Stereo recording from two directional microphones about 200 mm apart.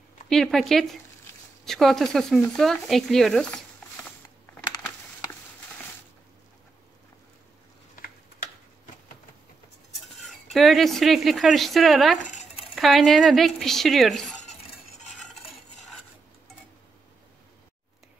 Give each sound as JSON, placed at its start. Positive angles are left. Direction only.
{"t": 0.3, "sound": "speech", "side_deg": 0}
{"t": 10.2, "sound": "speech", "side_deg": 0}
{"t": 12.2, "sound": "a sound", "side_deg": 40}
{"t": 12.7, "sound": "speech", "side_deg": 0}